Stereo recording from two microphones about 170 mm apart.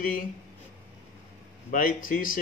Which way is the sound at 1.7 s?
55° left (ahead or behind).